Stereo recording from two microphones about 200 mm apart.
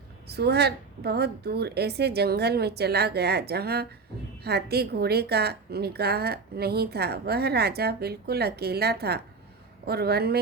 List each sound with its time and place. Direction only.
0.3 s a woman's voice: 55° right (ahead or behind)